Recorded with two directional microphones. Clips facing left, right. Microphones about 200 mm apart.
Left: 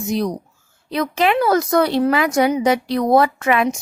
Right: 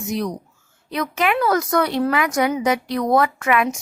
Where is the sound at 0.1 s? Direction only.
35° left (ahead or behind).